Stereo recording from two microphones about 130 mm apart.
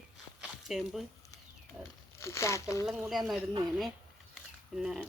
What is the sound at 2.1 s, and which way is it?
Speech, 20° left (ahead or behind).